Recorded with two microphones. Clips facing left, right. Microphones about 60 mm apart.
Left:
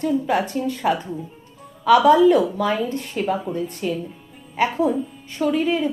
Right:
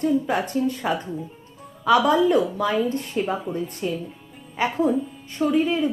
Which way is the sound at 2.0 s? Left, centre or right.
Left.